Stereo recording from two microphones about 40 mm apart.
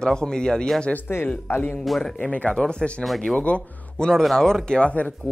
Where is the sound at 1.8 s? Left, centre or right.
Centre.